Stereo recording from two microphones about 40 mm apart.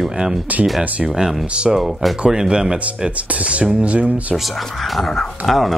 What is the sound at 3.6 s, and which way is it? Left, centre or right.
Speech, right.